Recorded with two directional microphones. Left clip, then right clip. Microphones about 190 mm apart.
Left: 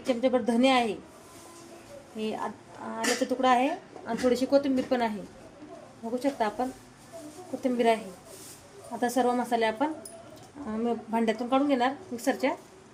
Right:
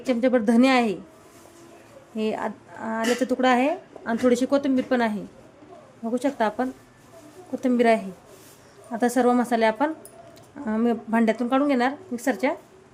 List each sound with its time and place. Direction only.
0.1 s speech: 40° right (ahead or behind)
2.1 s speech: 40° right (ahead or behind)
6.1 s speech: 35° right (ahead or behind)
9.0 s speech: 40° right (ahead or behind)